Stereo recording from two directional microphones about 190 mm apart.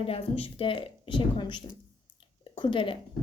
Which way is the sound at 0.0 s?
30° left (ahead or behind).